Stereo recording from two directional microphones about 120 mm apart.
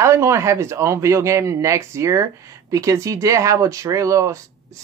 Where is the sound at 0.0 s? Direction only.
25° right (ahead or behind).